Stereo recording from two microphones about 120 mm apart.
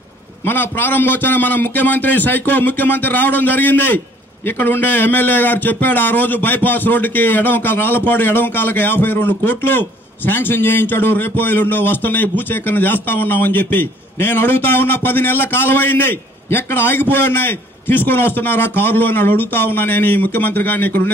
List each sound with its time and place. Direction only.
0.5 s a man's voice: 15° left (ahead or behind)